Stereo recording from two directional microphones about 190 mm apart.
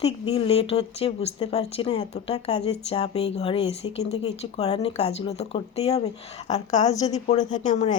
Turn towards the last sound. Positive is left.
turn(degrees=35)  # may be behind; listen again after turning